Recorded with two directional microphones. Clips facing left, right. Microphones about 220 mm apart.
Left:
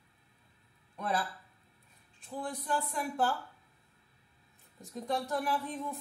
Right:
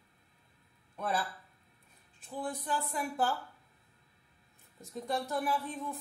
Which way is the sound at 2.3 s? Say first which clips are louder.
Left 1 dB; centre (ahead or behind).